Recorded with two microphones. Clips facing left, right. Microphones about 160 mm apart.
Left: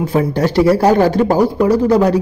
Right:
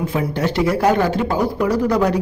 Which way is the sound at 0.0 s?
35° left (ahead or behind).